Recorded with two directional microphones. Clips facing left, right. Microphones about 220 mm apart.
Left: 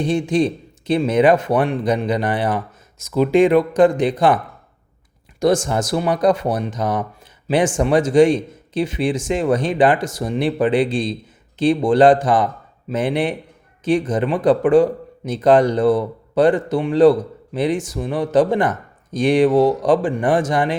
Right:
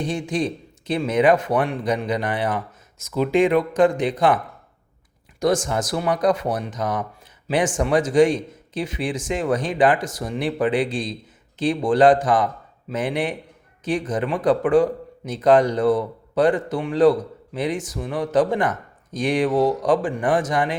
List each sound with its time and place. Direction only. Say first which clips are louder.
0.0 s speech: left 6 dB; 25° left (ahead or behind)
5.4 s speech: left 4 dB; 30° left (ahead or behind)